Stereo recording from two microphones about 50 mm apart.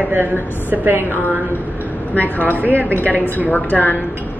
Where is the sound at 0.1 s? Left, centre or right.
Right.